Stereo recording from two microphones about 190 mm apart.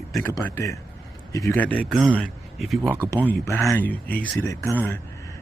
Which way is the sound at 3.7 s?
10° left (ahead or behind).